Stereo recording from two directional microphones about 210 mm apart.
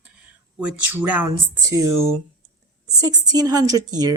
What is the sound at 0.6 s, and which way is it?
Speech, 10° right (ahead or behind).